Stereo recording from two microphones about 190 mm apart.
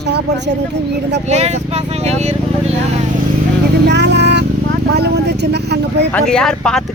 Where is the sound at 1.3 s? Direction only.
35° right (ahead or behind).